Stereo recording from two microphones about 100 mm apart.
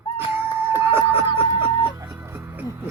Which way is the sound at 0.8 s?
25° right (ahead or behind).